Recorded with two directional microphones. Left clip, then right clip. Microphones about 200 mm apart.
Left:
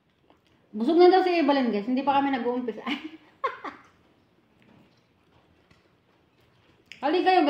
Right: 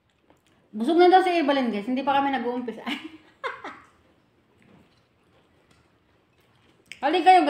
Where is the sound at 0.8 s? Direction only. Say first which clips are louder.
Right 1 dB; 25° right (ahead or behind).